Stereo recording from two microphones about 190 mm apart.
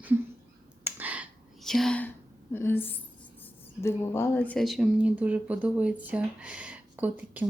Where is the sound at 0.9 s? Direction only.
10° right (ahead or behind); by 2.9 s 10° left (ahead or behind).